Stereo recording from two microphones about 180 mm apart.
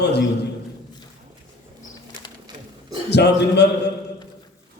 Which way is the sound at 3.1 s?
70° left (ahead or behind).